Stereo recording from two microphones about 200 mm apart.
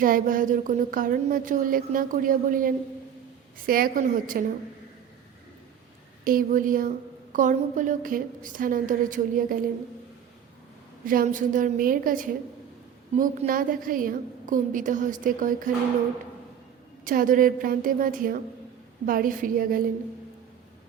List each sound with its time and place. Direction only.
0.0 s speech: 45° right (ahead or behind)
6.2 s a woman's voice: 45° right (ahead or behind)
11.0 s a woman's voice: 45° right (ahead or behind)
17.0 s speech: 45° right (ahead or behind)